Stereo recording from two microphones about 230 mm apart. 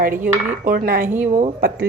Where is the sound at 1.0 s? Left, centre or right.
Centre.